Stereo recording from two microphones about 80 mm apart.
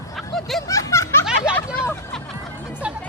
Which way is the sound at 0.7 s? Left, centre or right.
Left.